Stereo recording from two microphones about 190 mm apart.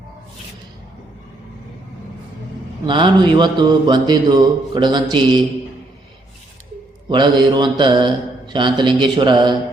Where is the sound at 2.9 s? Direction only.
25° right (ahead or behind).